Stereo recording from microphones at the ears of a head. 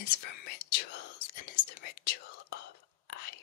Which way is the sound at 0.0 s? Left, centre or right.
Left.